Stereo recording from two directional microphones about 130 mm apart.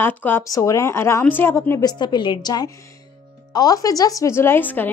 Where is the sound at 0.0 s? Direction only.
15° left (ahead or behind).